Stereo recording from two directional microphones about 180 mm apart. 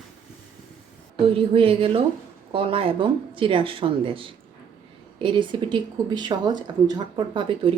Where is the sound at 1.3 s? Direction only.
30° right (ahead or behind).